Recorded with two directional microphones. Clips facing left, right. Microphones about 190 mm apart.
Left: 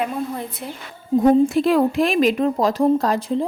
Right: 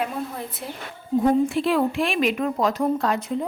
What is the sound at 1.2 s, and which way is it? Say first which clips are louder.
A woman's voice: left 5 dB; 40° left (ahead or behind).